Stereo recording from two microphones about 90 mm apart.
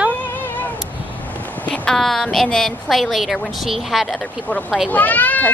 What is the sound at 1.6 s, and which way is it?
A woman's voice, 10° left (ahead or behind).